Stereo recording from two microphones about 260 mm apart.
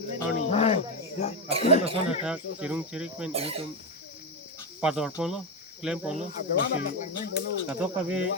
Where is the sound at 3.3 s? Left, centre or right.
Right.